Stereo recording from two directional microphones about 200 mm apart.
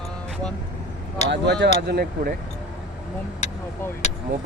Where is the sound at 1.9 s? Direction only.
50° right (ahead or behind).